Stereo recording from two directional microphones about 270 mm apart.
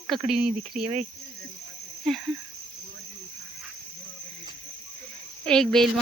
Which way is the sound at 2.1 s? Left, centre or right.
Centre.